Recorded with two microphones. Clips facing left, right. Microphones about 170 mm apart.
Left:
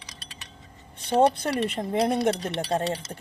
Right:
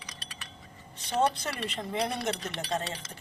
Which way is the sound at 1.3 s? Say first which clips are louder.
Left 9 dB; 55° left (ahead or behind).